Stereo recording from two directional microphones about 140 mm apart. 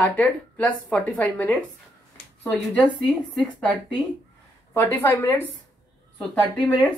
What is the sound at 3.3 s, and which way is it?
Speech, 5° left (ahead or behind).